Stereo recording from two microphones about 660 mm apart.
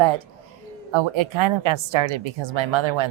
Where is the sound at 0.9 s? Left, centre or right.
Right.